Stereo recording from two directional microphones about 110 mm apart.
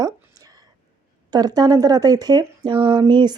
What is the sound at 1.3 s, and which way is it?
Speech, 40° right (ahead or behind).